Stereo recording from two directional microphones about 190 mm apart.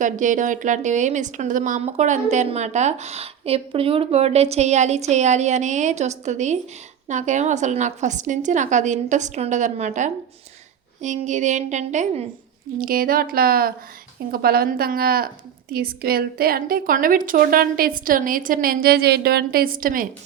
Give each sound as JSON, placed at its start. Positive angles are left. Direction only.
{"t": 0.0, "sound": "a woman's voice", "side_deg": -40}
{"t": 12.8, "sound": "a woman's voice", "side_deg": -50}